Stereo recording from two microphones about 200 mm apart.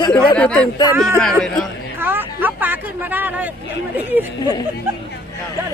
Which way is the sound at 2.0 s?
10° right (ahead or behind).